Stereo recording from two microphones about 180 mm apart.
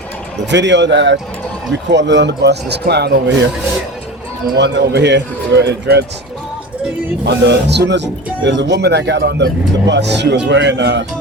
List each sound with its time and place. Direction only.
0.5 s speech: 75° right (ahead or behind)
4.5 s speech: 70° right (ahead or behind)
7.3 s speech: 75° right (ahead or behind)